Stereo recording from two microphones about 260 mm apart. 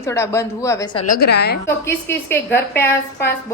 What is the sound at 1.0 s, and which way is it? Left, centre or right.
Speech, left.